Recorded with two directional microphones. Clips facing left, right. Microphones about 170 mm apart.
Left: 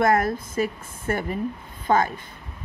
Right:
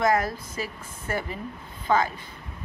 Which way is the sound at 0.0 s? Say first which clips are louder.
Left 3 dB; 55° left (ahead or behind).